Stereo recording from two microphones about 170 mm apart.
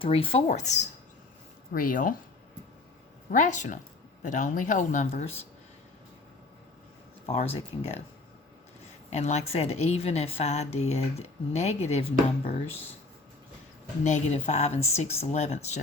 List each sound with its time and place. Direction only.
0.0 s a woman's voice: 30° left (ahead or behind)
1.7 s speech: 55° left (ahead or behind)
3.3 s speech: 45° left (ahead or behind)
7.3 s a woman's voice: 35° left (ahead or behind)
9.0 s a woman's voice: 40° left (ahead or behind)
14.0 s a woman's voice: 40° left (ahead or behind)